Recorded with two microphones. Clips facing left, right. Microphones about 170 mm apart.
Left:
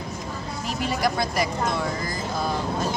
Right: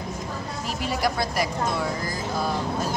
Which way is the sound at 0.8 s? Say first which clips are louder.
Left 1 dB; 5° right (ahead or behind).